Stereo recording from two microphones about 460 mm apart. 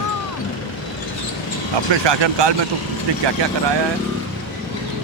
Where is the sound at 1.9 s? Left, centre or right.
Right.